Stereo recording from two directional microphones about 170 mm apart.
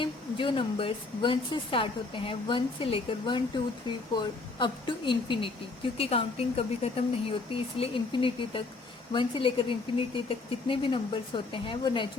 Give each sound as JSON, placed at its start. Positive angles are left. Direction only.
{"t": 0.0, "sound": "speech", "side_deg": 30}